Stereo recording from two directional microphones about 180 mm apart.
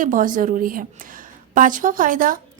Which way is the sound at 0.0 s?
50° right (ahead or behind).